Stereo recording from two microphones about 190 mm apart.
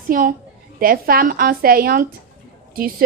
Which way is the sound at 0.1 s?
45° right (ahead or behind).